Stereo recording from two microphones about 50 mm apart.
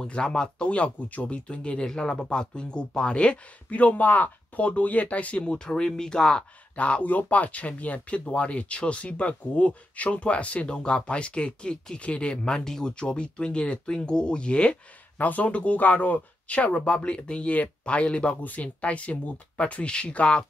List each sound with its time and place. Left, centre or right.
0.0 s speech: centre
6.7 s speech: left
15.1 s speech: left